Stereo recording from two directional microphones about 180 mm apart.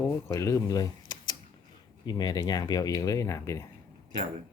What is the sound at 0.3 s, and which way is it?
Speech, 15° left (ahead or behind).